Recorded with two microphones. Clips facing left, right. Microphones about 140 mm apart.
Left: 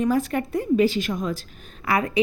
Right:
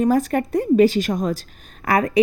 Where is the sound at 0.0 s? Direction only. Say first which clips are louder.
Right 4 dB; 40° right (ahead or behind).